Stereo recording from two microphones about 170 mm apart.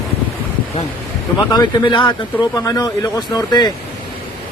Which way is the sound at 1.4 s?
20° left (ahead or behind).